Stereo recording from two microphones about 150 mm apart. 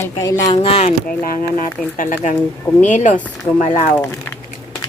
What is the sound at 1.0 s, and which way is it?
Speech, 75° left (ahead or behind).